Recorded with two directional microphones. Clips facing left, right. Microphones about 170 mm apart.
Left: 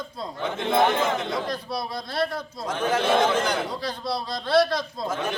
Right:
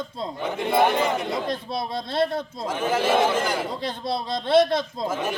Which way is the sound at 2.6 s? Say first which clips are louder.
Even; 5° right (ahead or behind).